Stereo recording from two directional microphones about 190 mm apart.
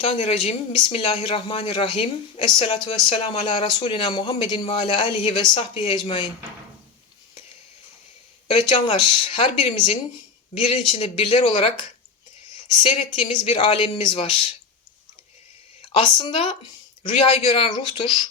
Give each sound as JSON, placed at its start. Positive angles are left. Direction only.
{"t": 0.0, "sound": "speech", "side_deg": 30}
{"t": 8.7, "sound": "speech", "side_deg": 25}
{"t": 12.7, "sound": "speech", "side_deg": 30}
{"t": 15.9, "sound": "speech", "side_deg": 25}